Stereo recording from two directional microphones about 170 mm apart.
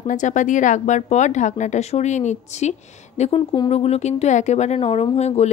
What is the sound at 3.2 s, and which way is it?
Speech, 30° left (ahead or behind).